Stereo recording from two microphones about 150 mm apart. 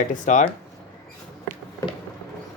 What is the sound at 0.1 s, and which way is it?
Speech, 55° left (ahead or behind).